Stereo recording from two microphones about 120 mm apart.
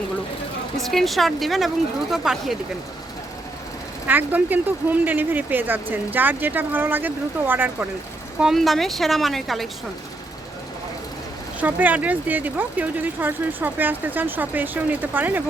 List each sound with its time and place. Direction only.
0.8 s speech: centre (ahead or behind)
4.0 s speech: 15° right (ahead or behind)
8.4 s speech: centre (ahead or behind)
11.6 s speech: 15° right (ahead or behind)